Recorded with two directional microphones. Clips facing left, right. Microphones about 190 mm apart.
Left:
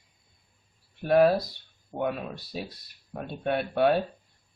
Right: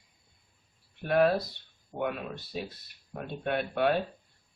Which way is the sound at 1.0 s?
40° left (ahead or behind).